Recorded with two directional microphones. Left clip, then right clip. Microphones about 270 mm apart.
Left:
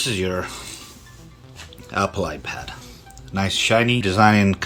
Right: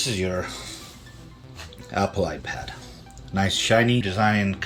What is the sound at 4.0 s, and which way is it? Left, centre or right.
Speech, left.